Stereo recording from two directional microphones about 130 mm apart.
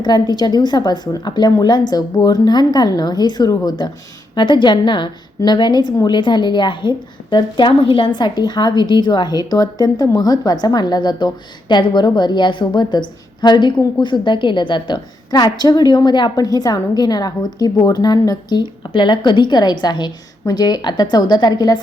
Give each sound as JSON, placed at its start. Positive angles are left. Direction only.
{"t": 0.0, "sound": "a woman's voice", "side_deg": 35}